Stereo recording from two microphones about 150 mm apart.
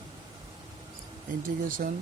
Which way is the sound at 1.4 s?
65° right (ahead or behind).